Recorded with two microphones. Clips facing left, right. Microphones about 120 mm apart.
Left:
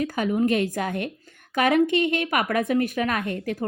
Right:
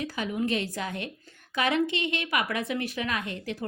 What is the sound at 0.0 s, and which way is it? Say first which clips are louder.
A woman's voice: left 7 dB; 45° left (ahead or behind).